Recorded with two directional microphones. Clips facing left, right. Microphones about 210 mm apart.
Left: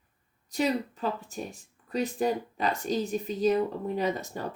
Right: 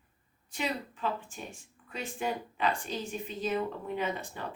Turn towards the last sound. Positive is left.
turn(degrees=40)  # may be behind; listen again after turning